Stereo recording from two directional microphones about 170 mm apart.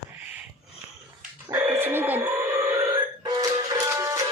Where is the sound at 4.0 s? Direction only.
20° right (ahead or behind).